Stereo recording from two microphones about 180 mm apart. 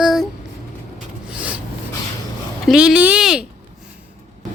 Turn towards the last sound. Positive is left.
turn(degrees=-5)  # may be behind; listen again after turning